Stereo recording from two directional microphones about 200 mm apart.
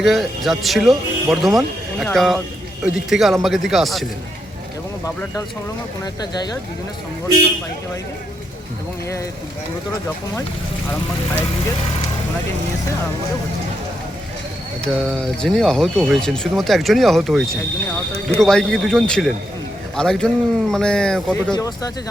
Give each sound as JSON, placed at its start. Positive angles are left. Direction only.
{"t": 0.0, "sound": "speech", "side_deg": 0}
{"t": 14.9, "sound": "speech", "side_deg": 0}
{"t": 21.5, "sound": "speech", "side_deg": 20}